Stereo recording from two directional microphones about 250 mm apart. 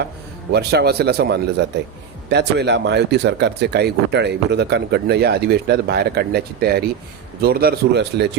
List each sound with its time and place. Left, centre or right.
0.5 s speech: right